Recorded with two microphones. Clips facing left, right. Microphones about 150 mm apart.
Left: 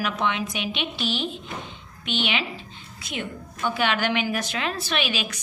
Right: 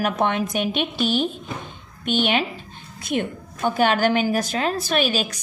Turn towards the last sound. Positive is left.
turn(degrees=-40)  # may be behind; listen again after turning